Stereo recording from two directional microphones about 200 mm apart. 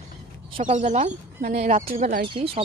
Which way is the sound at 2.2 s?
25° right (ahead or behind).